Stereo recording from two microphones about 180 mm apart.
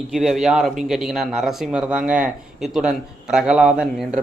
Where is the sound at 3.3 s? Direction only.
5° right (ahead or behind).